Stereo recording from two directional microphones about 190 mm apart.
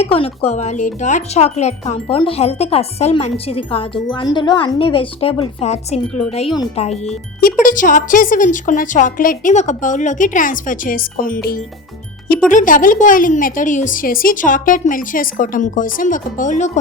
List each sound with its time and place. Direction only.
0.0 s speech: 30° left (ahead or behind)
7.6 s speech: 45° left (ahead or behind)